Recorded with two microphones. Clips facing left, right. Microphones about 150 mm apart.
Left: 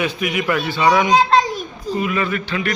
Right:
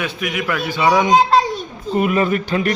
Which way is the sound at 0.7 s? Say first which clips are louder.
Right 1 dB; 15° right (ahead or behind).